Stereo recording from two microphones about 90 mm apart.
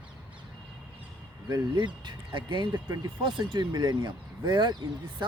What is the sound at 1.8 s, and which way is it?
Speech, 55° right (ahead or behind).